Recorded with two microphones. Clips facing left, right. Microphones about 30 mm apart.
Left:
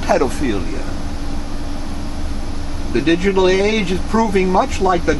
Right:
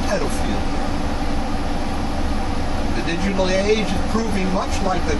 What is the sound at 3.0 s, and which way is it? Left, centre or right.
Speech, left.